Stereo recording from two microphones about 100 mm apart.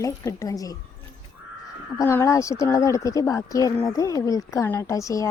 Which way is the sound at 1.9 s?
30° left (ahead or behind).